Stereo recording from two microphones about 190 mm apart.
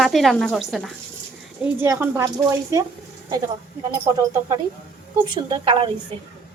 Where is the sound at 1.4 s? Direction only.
5° right (ahead or behind).